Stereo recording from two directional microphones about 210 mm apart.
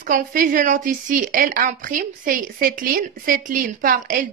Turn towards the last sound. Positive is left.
turn(degrees=-40)  # may be behind; listen again after turning